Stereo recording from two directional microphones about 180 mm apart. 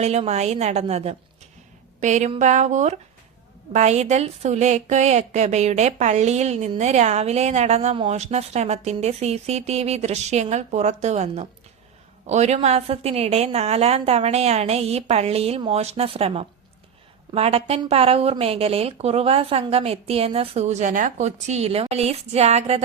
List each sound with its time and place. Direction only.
0.0 s a woman's voice: 35° right (ahead or behind)